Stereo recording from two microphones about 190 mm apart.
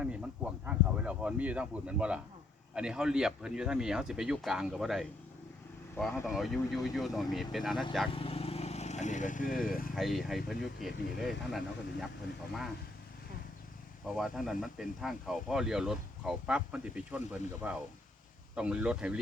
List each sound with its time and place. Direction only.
0.0 s speech: 5° right (ahead or behind)
8.1 s vehicle: 30° left (ahead or behind)
9.6 s speech: 50° left (ahead or behind)
9.9 s speech: centre (ahead or behind)
14.2 s speech: centre (ahead or behind)